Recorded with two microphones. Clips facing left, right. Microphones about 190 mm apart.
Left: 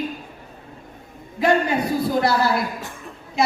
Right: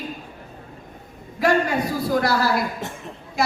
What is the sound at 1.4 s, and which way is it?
Speech, 25° left (ahead or behind).